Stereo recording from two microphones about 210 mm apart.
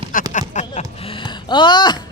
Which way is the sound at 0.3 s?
35° left (ahead or behind).